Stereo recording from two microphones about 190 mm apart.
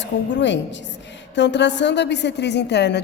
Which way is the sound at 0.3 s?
70° left (ahead or behind).